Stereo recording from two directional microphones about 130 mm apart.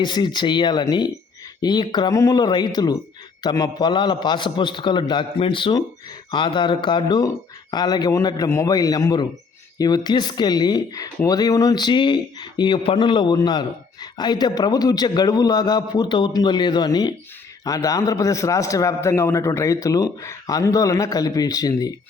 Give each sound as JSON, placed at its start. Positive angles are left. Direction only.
{"t": 0.0, "sound": "speech", "side_deg": 35}
{"t": 2.1, "sound": "speech", "side_deg": 25}
{"t": 2.4, "sound": "speech", "side_deg": 35}